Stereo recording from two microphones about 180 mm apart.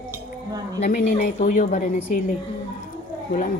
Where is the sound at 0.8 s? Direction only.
40° left (ahead or behind).